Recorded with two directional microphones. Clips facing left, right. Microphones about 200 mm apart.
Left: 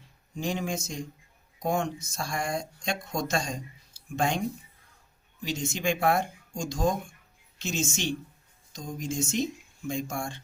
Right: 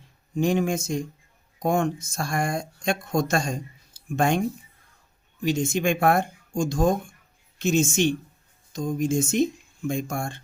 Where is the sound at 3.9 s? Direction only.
55° right (ahead or behind).